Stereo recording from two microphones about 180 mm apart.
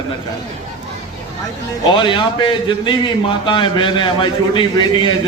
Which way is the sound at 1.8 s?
25° left (ahead or behind).